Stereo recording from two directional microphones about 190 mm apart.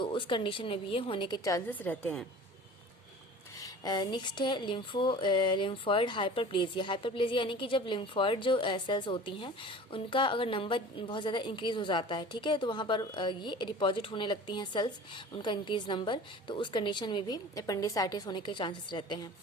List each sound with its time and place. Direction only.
0.0 s speech: 25° left (ahead or behind); by 2.2 s 5° left (ahead or behind)
3.6 s speech: 20° left (ahead or behind)